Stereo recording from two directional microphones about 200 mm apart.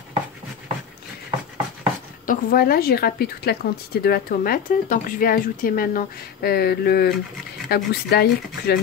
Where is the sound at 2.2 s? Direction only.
45° left (ahead or behind).